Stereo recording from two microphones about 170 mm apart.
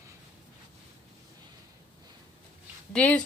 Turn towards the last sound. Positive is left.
turn(degrees=5)  # may be behind; listen again after turning